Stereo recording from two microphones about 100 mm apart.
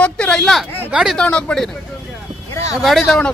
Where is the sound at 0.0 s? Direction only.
10° left (ahead or behind).